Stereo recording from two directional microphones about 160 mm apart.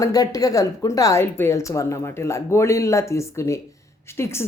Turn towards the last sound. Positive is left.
turn(degrees=15)  # may be behind; listen again after turning